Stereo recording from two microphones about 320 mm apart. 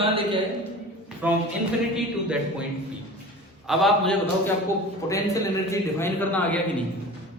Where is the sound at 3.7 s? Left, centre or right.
Centre.